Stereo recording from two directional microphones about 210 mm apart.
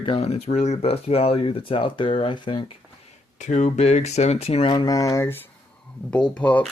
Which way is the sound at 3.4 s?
35° left (ahead or behind).